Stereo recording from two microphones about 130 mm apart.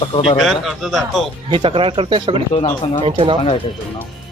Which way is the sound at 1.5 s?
40° right (ahead or behind).